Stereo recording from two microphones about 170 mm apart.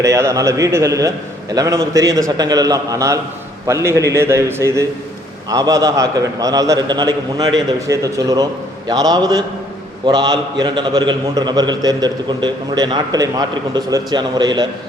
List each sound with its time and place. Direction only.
0.0 s a man's voice: 20° right (ahead or behind)